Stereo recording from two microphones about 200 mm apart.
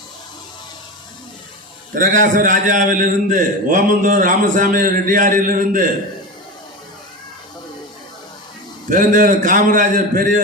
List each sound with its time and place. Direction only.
2.0 s a man's voice: 40° right (ahead or behind)
8.9 s a man's voice: 40° right (ahead or behind)